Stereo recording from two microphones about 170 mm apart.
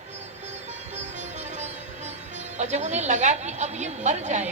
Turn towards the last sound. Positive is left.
turn(degrees=-45)  # may be behind; listen again after turning